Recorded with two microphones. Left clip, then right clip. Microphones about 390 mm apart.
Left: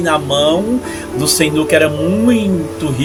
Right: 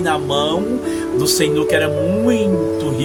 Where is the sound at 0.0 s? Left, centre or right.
Right.